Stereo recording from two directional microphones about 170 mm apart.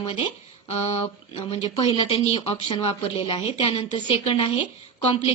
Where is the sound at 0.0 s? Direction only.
30° left (ahead or behind).